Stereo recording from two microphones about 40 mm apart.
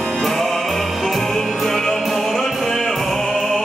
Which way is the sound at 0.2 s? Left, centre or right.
Centre.